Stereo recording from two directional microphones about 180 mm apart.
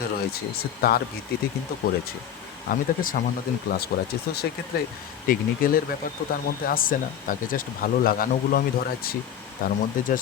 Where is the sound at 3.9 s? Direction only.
65° left (ahead or behind).